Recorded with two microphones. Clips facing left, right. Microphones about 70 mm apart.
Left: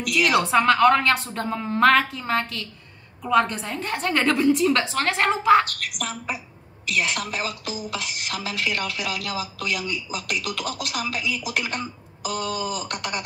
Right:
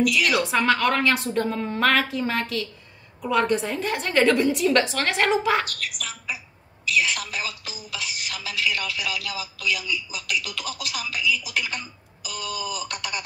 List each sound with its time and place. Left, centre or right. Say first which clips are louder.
0.0 s speech: even; left
0.4 s a woman's voice: left 4 dB; centre
5.9 s speech: left 4 dB; left